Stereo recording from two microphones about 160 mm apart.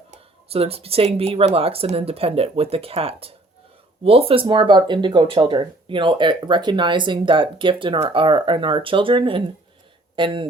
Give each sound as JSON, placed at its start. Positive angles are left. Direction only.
{"t": 0.1, "sound": "speech", "side_deg": -40}